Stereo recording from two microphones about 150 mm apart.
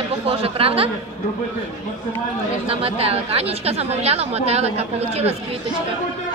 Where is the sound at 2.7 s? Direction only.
40° right (ahead or behind).